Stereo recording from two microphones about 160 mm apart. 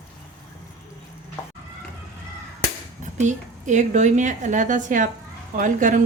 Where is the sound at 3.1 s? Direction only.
50° right (ahead or behind).